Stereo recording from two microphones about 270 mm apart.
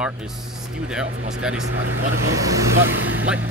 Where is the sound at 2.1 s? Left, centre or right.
Right.